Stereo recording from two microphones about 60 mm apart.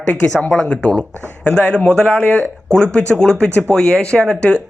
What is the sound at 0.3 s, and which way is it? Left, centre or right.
Speech, centre.